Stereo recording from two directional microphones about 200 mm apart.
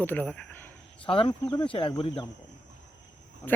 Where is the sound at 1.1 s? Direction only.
25° left (ahead or behind).